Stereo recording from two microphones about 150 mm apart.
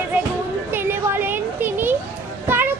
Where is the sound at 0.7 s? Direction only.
15° right (ahead or behind).